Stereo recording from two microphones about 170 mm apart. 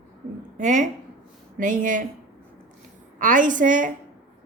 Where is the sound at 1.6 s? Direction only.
50° right (ahead or behind).